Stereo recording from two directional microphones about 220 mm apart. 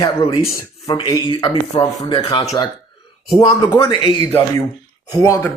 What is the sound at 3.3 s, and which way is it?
Speech, 15° left (ahead or behind).